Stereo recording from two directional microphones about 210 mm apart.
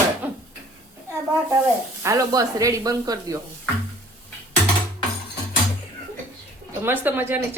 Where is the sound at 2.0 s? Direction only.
15° right (ahead or behind).